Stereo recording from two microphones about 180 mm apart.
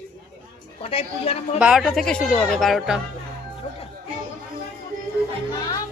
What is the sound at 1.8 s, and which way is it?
Speech, centre (ahead or behind).